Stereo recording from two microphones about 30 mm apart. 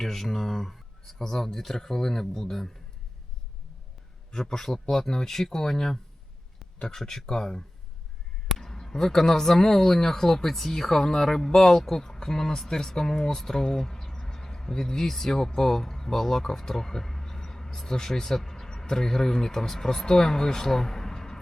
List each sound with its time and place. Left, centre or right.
0.0 s speech: centre
4.4 s speech: centre
8.6 s speech: centre
14.3 s a sound: centre
15.0 s speech: centre